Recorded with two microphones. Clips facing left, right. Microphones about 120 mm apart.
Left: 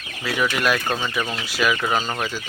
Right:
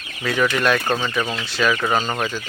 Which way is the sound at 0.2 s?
5° left (ahead or behind).